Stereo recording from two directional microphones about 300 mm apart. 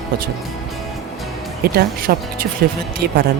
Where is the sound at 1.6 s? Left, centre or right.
Right.